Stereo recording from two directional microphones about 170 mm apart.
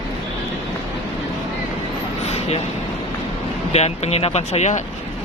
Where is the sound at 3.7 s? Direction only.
40° left (ahead or behind).